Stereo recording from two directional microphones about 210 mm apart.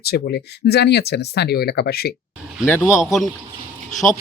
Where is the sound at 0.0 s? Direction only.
50° left (ahead or behind).